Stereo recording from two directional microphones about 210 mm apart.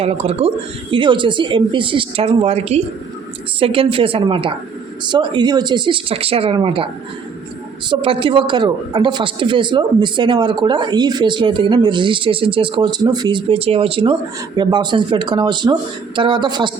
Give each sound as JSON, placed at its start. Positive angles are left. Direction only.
{"t": 0.0, "sound": "a man's voice", "side_deg": -30}
{"t": 7.9, "sound": "a man's voice", "side_deg": -25}